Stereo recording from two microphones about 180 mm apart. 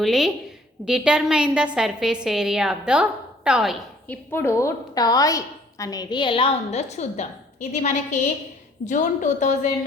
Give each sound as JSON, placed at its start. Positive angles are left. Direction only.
{"t": 0.0, "sound": "a woman's voice", "side_deg": 0}
{"t": 4.1, "sound": "a woman's voice", "side_deg": 10}